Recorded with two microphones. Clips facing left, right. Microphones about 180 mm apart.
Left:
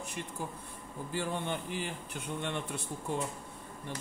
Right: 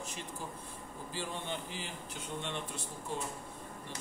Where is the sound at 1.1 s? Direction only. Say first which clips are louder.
Left 5 dB; 55° left (ahead or behind).